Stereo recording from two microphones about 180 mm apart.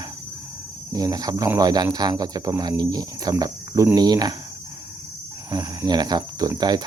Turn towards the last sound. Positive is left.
turn(degrees=-25)  # may be behind; listen again after turning